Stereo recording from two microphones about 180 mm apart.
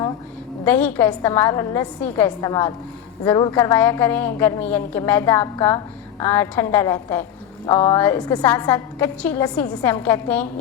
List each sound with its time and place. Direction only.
0.6 s a woman's voice: 10° left (ahead or behind)